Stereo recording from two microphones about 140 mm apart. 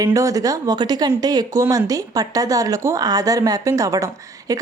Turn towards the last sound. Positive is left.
turn(degrees=-25)  # may be behind; listen again after turning